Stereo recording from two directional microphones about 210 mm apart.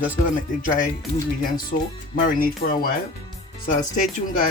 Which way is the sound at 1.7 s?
40° left (ahead or behind).